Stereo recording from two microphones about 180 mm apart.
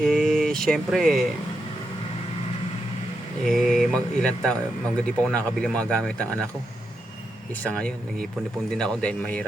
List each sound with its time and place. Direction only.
0.1 s speech: centre (ahead or behind)
3.4 s speech: centre (ahead or behind)
7.6 s speech: 5° left (ahead or behind)